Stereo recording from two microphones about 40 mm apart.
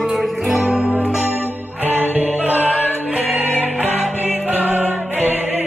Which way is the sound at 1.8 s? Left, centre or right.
Left.